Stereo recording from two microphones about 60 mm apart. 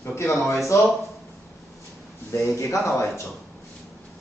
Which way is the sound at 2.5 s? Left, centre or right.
Left.